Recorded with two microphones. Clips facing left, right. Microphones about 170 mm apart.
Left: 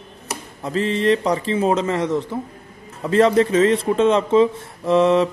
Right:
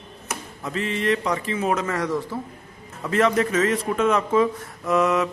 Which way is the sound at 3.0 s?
30° left (ahead or behind).